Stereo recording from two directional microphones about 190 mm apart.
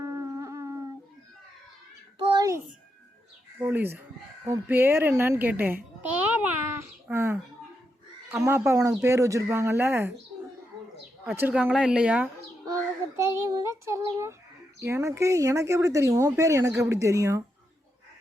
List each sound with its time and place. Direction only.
0.0 s howl: 15° right (ahead or behind)
2.3 s music: 15° right (ahead or behind)
3.6 s a child's voice: 10° right (ahead or behind)
11.3 s speech: 10° right (ahead or behind)